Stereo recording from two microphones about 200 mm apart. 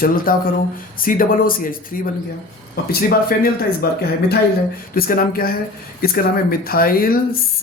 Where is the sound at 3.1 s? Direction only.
45° left (ahead or behind).